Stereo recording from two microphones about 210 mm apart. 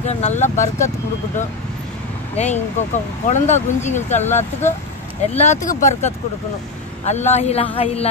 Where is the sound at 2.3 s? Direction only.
35° left (ahead or behind).